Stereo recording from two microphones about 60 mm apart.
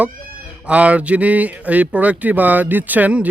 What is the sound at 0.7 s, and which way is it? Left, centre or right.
Speech, right.